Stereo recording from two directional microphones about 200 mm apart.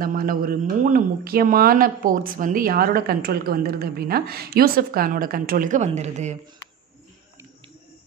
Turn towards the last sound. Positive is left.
turn(degrees=-35)  # may be behind; listen again after turning